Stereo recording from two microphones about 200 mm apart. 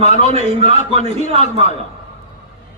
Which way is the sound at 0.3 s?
30° right (ahead or behind).